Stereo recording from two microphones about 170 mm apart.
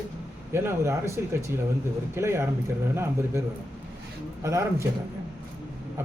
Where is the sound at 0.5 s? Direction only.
15° right (ahead or behind).